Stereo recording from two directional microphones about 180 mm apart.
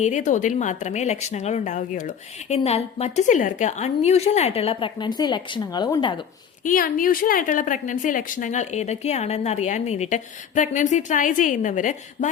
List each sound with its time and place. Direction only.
0.0 s a woman's voice: 45° left (ahead or behind); by 6.1 s 25° left (ahead or behind)
6.7 s a woman's voice: 50° left (ahead or behind)